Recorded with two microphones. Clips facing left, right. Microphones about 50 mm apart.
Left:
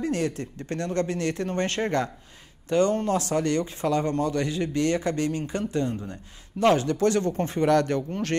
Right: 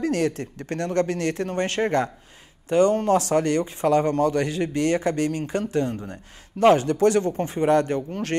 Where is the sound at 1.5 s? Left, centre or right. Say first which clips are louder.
Right 4 dB; right.